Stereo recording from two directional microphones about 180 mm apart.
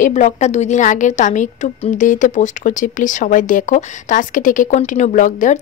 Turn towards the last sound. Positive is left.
turn(degrees=45)  # may be behind; listen again after turning